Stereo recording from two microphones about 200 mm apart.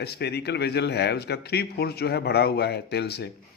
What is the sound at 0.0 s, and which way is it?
A man's voice, 55° left (ahead or behind).